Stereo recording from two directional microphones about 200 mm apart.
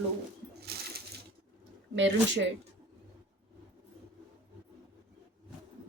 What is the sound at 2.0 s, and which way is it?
Speech, 65° right (ahead or behind).